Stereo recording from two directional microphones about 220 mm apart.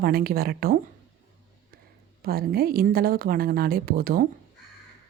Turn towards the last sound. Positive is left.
turn(degrees=-40)  # may be behind; listen again after turning